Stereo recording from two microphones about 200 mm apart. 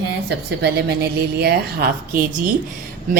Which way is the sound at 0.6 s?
55° right (ahead or behind).